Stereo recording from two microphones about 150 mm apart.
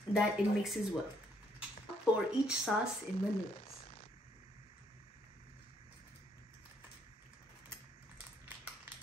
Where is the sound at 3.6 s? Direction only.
40° left (ahead or behind).